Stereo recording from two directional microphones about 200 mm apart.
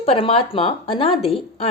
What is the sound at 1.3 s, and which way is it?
Speech, 30° left (ahead or behind).